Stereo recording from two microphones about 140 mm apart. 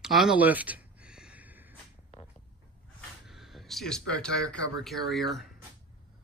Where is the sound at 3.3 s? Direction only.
Centre (ahead or behind).